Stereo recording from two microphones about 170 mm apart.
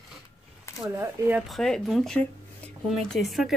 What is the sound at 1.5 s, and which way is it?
A woman's voice, centre (ahead or behind).